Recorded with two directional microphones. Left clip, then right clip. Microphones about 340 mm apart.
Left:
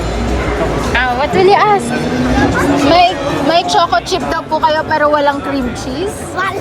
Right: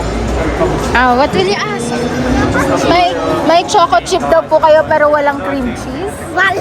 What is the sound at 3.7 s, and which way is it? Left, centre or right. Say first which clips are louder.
Speech: right 3 dB; centre.